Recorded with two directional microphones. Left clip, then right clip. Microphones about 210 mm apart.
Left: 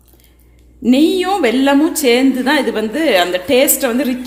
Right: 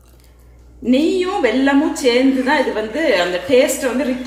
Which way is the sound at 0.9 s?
45° left (ahead or behind).